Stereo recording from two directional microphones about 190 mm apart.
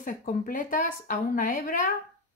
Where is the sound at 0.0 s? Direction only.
45° left (ahead or behind).